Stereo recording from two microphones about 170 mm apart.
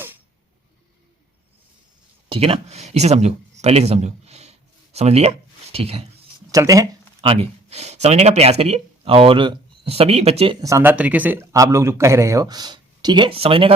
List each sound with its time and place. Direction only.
2.3 s speech: 35° right (ahead or behind)
6.5 s speech: 20° right (ahead or behind)
7.2 s speech: 35° right (ahead or behind)
10.6 s speech: 15° right (ahead or behind); by 13.7 s 30° right (ahead or behind)